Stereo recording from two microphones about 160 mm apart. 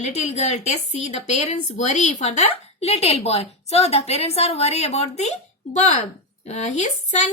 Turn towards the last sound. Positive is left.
turn(degrees=45)  # may be behind; listen again after turning